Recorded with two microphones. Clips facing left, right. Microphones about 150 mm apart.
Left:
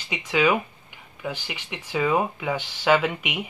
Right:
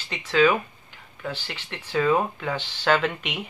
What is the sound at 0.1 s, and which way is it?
Speech, 10° left (ahead or behind).